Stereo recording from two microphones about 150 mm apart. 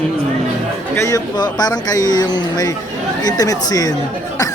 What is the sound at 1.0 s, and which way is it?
Speech, 25° left (ahead or behind).